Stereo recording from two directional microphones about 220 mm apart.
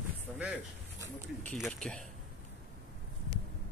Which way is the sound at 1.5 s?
Centre (ahead or behind).